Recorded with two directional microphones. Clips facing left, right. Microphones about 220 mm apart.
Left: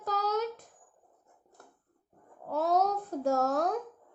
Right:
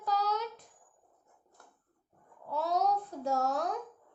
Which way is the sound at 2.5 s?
50° left (ahead or behind).